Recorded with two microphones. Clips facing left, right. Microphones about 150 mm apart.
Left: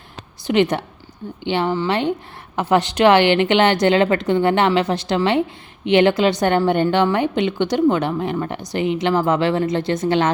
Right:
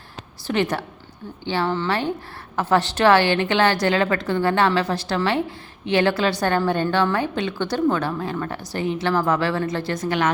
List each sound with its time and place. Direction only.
0.4 s a woman's voice: 20° left (ahead or behind)